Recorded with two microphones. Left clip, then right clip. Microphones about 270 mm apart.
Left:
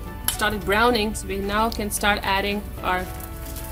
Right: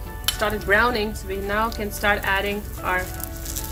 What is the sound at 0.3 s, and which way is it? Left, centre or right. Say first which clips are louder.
A woman's voice: right 1 dB; left.